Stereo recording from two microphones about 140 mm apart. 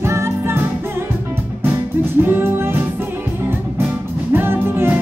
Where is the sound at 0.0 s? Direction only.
20° right (ahead or behind).